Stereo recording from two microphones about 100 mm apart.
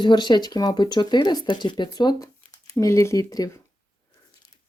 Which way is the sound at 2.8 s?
30° left (ahead or behind).